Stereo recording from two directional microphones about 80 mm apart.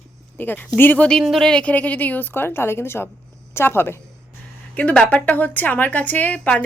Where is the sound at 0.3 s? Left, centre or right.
Left.